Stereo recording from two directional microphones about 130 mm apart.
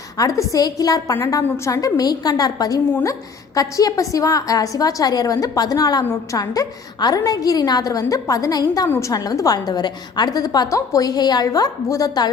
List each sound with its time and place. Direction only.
0.2 s a woman's voice: 25° left (ahead or behind)